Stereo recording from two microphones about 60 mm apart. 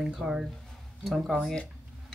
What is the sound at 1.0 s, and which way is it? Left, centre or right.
Speech, centre.